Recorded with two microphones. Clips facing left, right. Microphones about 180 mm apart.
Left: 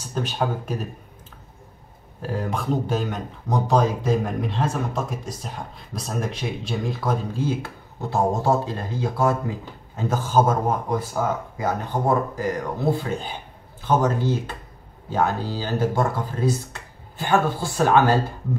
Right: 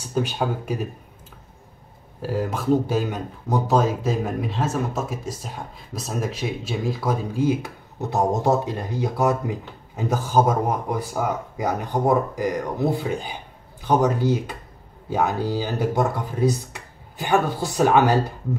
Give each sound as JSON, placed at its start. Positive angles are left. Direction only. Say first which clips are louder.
{"t": 0.1, "sound": "speech", "louder": "right 2 dB", "side_deg": -10}
{"t": 2.2, "sound": "speech", "louder": "right 3 dB", "side_deg": -5}
{"t": 11.5, "sound": "speech", "louder": "right 1 dB", "side_deg": -15}